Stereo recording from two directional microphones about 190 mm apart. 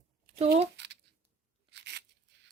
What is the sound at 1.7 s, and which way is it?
Tearing, 60° right (ahead or behind).